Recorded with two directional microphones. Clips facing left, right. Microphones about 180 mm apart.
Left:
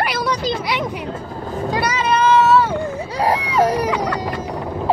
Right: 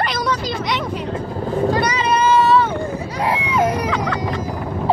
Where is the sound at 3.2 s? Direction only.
40° left (ahead or behind).